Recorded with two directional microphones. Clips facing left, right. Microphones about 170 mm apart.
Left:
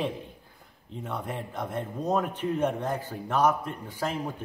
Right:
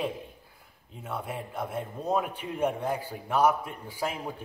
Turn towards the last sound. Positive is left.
turn(degrees=-10)  # may be behind; listen again after turning